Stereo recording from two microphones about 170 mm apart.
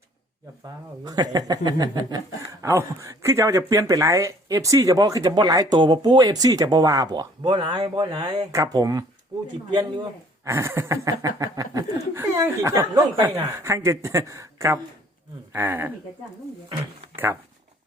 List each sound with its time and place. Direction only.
1.0 s speech: 25° right (ahead or behind)